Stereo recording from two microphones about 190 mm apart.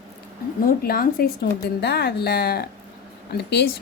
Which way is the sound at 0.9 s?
50° left (ahead or behind).